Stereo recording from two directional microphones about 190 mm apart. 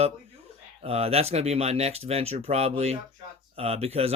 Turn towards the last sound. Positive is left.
turn(degrees=-30)  # may be behind; listen again after turning